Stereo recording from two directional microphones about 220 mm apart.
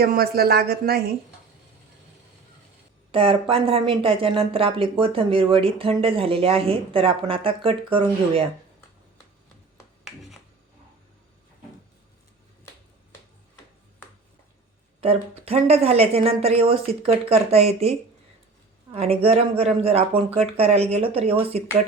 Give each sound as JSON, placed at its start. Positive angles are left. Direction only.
{"t": 0.0, "sound": "speech", "side_deg": -45}
{"t": 3.1, "sound": "speech", "side_deg": -25}
{"t": 15.0, "sound": "speech", "side_deg": -25}